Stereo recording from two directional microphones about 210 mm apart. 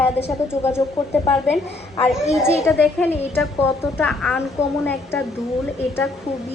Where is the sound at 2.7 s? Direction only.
10° left (ahead or behind).